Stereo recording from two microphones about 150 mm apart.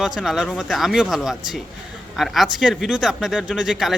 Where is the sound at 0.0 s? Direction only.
5° right (ahead or behind).